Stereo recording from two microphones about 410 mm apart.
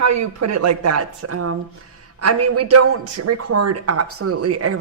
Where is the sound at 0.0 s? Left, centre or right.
Right.